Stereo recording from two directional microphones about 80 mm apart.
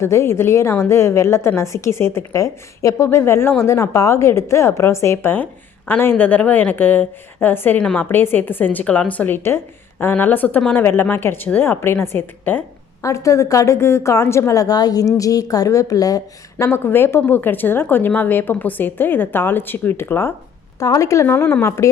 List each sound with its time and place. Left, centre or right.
0.0 s a woman's voice: left
7.8 s a woman's voice: centre
8.1 s speech: left
13.0 s a woman's voice: left
16.6 s speech: left
20.7 s a woman's voice: left
21.2 s speech: left
21.6 s a woman's voice: left